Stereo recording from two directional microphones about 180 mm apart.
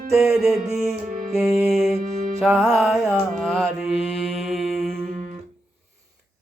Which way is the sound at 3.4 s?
Centre (ahead or behind).